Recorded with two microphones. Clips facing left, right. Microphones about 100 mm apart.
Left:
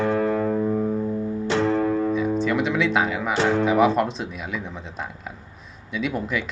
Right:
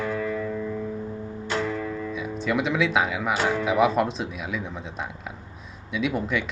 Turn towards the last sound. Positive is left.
turn(degrees=0)  # may be behind; listen again after turning